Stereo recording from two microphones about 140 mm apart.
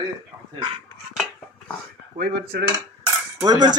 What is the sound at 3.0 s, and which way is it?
Cutlery, 25° right (ahead or behind).